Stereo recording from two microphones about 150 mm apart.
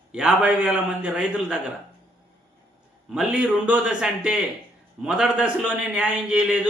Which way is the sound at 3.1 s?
5° right (ahead or behind).